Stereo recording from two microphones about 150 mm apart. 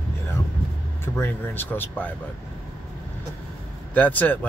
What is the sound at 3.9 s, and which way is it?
Speech, 10° left (ahead or behind).